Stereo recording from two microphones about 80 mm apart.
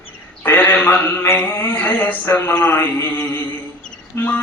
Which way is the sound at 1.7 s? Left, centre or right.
Left.